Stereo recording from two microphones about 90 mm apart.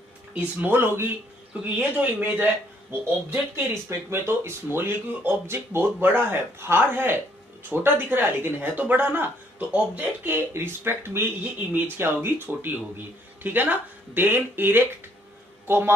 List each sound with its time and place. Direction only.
0.3 s a man's voice: 20° right (ahead or behind)